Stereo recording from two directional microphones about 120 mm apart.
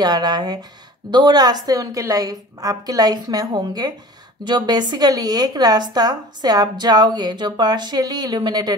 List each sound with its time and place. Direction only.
0.0 s a woman's voice: 35° right (ahead or behind)